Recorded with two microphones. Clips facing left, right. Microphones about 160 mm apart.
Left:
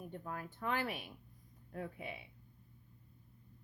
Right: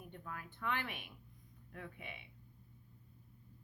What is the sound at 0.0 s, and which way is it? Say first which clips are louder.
A woman's voice: left 5 dB; 40° left (ahead or behind).